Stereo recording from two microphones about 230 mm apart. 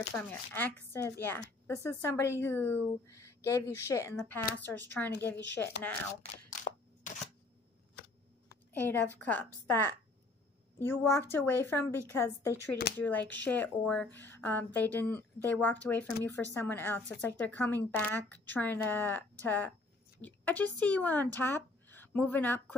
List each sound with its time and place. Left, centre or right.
0.1 s a woman's voice: centre
6.6 s a sound: left
8.7 s a woman's voice: centre
12.5 s speech: left
13.0 s a woman's voice: centre